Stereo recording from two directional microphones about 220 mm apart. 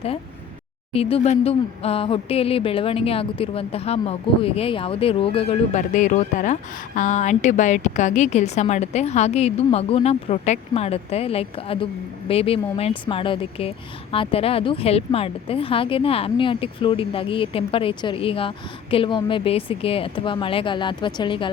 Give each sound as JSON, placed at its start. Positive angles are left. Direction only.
{"t": 0.9, "sound": "speech", "side_deg": 30}